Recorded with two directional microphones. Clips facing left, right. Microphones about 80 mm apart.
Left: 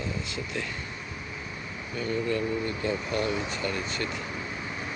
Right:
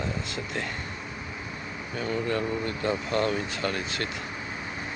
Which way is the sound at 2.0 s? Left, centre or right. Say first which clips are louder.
Even; right.